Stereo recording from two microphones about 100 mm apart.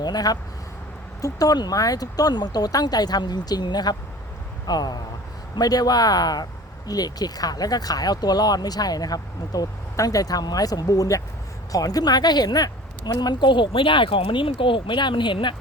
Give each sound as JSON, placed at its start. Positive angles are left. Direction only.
{"t": 0.0, "sound": "a woman's voice", "side_deg": 40}